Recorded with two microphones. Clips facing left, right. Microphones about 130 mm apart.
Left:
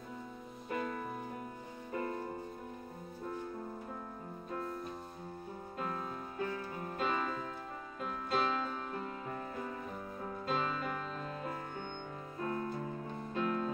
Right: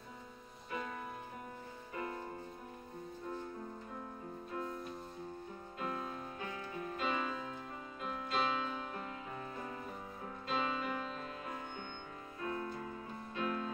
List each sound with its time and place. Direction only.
0.7 s music: 50° left (ahead or behind)
1.9 s music: 40° left (ahead or behind)
5.8 s music: 40° left (ahead or behind)
10.4 s music: 45° left (ahead or behind)